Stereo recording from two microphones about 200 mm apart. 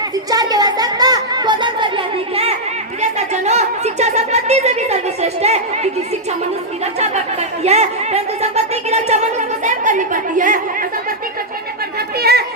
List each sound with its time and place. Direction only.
0.3 s a sound: 20° right (ahead or behind)
7.0 s speech: 30° right (ahead or behind)
9.6 s chatter: 40° right (ahead or behind)
11.9 s chatter: 50° right (ahead or behind)